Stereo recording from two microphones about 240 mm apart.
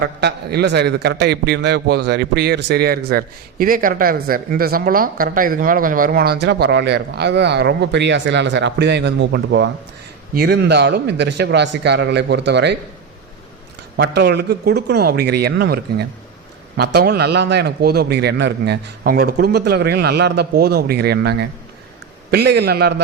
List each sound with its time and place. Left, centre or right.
0.0 s a man's voice: right
13.9 s a man's voice: right